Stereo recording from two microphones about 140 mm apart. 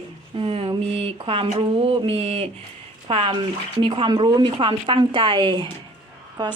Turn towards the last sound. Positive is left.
turn(degrees=-30)  # may be behind; listen again after turning